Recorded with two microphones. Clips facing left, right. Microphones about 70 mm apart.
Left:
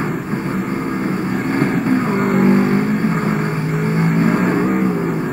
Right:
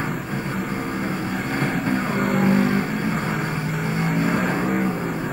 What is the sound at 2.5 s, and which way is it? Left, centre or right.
Vehicle, left.